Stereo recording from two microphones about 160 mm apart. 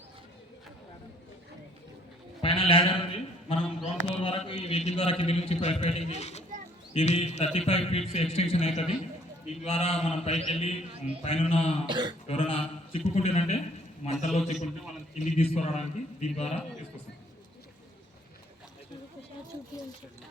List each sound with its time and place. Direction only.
2.4 s bleat: 35° left (ahead or behind)
4.2 s a man's voice: 30° left (ahead or behind)
11.9 s cough: 30° right (ahead or behind)
12.3 s a man's voice: 35° left (ahead or behind)